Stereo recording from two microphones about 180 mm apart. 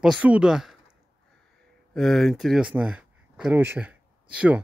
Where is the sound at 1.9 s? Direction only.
Centre (ahead or behind).